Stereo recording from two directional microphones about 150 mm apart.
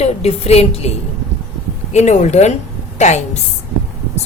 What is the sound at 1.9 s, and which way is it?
A woman's voice, 50° left (ahead or behind).